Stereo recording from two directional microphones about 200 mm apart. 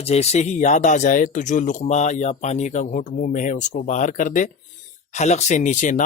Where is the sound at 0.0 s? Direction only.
30° left (ahead or behind).